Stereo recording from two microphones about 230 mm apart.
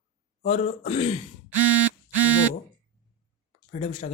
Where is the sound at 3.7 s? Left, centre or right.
Left.